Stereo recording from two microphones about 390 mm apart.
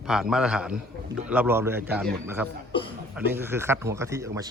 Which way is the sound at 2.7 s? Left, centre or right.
Centre.